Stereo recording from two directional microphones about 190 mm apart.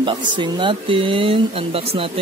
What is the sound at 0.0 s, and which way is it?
Speech, 25° right (ahead or behind).